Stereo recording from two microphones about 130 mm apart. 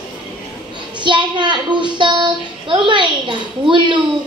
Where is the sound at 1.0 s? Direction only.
35° right (ahead or behind).